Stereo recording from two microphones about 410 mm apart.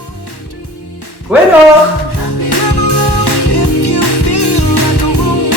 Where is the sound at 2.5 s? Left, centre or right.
Left.